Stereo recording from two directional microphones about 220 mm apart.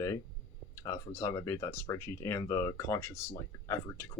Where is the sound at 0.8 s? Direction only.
15° left (ahead or behind).